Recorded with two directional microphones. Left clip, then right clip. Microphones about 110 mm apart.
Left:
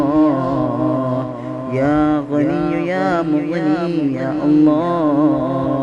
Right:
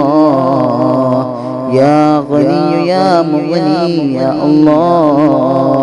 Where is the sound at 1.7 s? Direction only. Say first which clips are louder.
Right 8 dB; 30° right (ahead or behind).